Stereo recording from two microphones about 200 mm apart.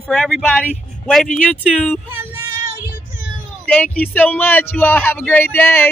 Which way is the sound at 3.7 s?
5° left (ahead or behind).